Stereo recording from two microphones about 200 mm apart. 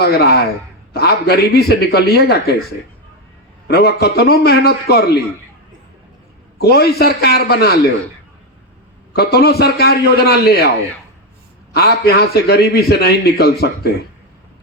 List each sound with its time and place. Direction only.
0.0 s a man's voice: 50° left (ahead or behind)
3.7 s a man's voice: 55° left (ahead or behind)
6.6 s a man's voice: 55° left (ahead or behind)
9.1 s a man's voice: 55° left (ahead or behind)
11.7 s a man's voice: 55° left (ahead or behind)